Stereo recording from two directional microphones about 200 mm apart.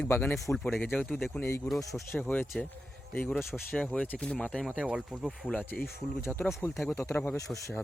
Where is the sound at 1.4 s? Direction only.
15° left (ahead or behind).